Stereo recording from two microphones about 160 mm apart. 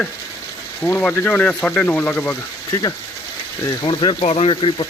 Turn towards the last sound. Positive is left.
turn(degrees=30)  # may be behind; listen again after turning